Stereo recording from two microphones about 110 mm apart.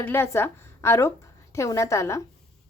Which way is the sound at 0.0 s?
20° left (ahead or behind).